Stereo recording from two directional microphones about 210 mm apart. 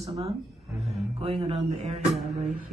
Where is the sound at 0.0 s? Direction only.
25° right (ahead or behind).